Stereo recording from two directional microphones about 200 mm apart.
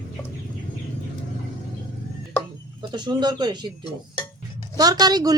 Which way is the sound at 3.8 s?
20° left (ahead or behind).